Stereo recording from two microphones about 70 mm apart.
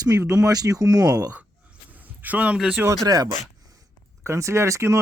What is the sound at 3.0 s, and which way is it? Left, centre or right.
Speech, right.